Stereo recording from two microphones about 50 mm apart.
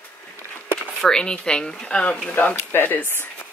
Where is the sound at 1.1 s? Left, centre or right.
Centre.